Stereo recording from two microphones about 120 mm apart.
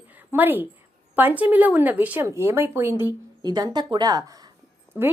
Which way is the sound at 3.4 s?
35° right (ahead or behind).